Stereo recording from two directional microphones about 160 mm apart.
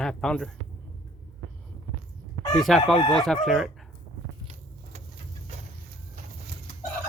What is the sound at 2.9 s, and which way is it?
Speech, 35° left (ahead or behind).